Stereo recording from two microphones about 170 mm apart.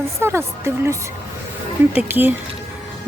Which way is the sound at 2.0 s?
10° right (ahead or behind).